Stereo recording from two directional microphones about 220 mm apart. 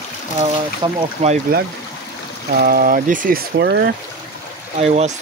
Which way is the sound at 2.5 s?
40° right (ahead or behind).